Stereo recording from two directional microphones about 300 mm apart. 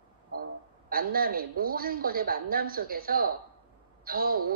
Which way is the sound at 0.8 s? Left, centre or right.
Right.